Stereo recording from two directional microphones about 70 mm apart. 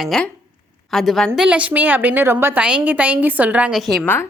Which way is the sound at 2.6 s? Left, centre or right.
Centre.